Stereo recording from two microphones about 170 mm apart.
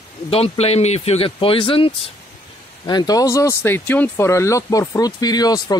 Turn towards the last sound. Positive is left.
turn(degrees=20)  # may be behind; listen again after turning